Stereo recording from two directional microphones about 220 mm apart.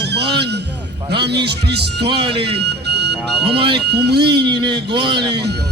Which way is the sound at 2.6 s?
50° right (ahead or behind).